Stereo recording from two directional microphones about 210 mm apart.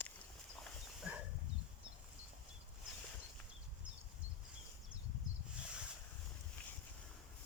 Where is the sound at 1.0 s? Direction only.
5° right (ahead or behind).